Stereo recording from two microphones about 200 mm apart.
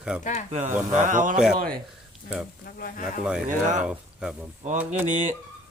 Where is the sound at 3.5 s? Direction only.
40° right (ahead or behind).